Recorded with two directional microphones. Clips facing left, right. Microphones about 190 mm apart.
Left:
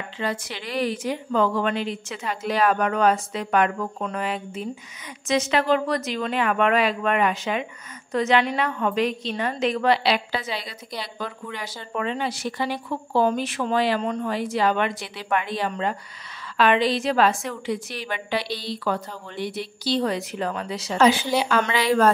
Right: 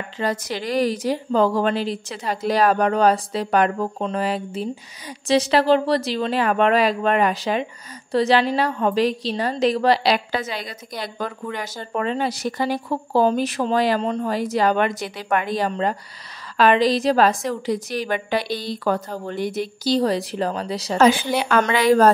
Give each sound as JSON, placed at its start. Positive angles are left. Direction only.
{"t": 0.2, "sound": "a woman's voice", "side_deg": -40}
{"t": 21.6, "sound": "a woman's voice", "side_deg": -45}